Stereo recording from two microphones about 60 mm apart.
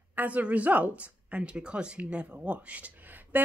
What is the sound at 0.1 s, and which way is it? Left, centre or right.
Speech, right.